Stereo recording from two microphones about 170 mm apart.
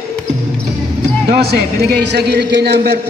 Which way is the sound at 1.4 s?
75° right (ahead or behind).